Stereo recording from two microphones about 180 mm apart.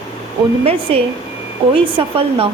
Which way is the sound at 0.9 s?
30° right (ahead or behind).